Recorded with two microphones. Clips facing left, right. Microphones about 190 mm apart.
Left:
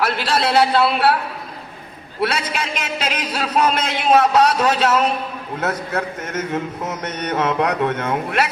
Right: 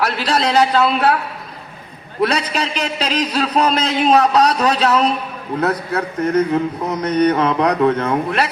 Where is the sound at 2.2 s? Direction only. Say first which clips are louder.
Right 4 dB; 35° right (ahead or behind).